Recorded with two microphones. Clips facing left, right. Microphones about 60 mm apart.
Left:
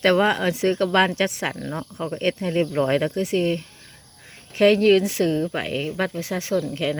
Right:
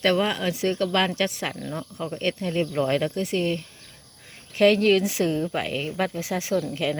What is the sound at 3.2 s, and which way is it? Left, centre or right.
Speech, centre.